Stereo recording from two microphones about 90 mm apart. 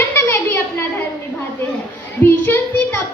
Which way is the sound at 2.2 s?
25° left (ahead or behind).